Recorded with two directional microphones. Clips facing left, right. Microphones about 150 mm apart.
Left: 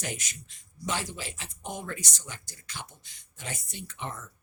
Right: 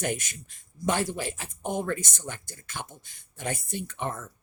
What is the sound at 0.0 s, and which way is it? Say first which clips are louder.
Speech: right 7 dB; 50° right (ahead or behind).